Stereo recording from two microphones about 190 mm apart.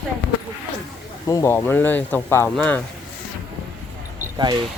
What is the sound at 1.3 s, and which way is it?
Speech, 15° left (ahead or behind).